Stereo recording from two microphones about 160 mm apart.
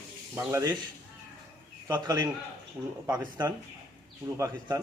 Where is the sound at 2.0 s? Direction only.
25° right (ahead or behind).